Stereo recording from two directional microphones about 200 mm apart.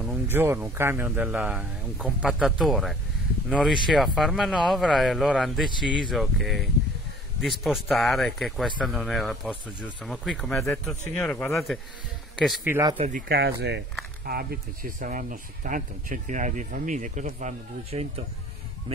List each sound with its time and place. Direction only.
0.0 s speech: 10° right (ahead or behind)
12.4 s speech: 10° right (ahead or behind)
12.9 s speech: 35° right (ahead or behind)
13.3 s speech: 55° right (ahead or behind); by 19.0 s 30° right (ahead or behind)